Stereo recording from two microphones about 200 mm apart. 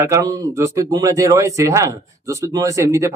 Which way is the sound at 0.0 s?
15° right (ahead or behind).